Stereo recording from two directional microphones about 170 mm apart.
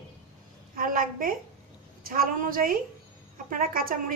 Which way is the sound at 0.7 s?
55° right (ahead or behind).